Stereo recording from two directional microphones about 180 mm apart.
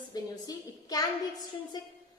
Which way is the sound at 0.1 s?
20° left (ahead or behind).